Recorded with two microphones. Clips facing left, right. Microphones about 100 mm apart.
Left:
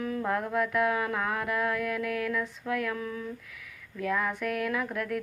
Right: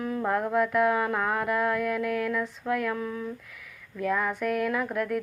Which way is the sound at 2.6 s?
5° right (ahead or behind).